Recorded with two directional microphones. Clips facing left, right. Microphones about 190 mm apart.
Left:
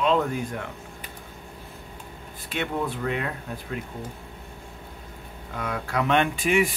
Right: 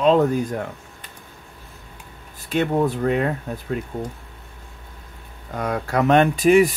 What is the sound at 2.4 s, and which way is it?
Speech, 40° right (ahead or behind).